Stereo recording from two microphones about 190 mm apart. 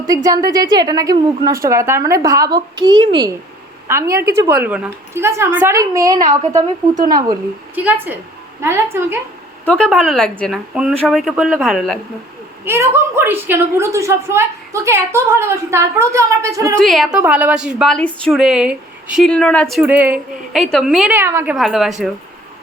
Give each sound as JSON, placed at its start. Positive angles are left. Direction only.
{"t": 0.1, "sound": "a woman's voice", "side_deg": -20}
{"t": 6.9, "sound": "speech", "side_deg": -50}
{"t": 8.6, "sound": "a woman's voice", "side_deg": -15}
{"t": 9.6, "sound": "a woman's voice", "side_deg": 5}
{"t": 12.6, "sound": "a woman's voice", "side_deg": -15}
{"t": 16.7, "sound": "a woman's voice", "side_deg": 0}
{"t": 21.5, "sound": "a woman's voice", "side_deg": 0}